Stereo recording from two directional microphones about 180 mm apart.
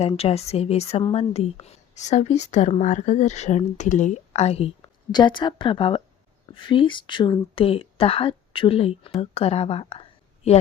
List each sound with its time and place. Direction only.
0.1 s a woman's voice: 35° left (ahead or behind)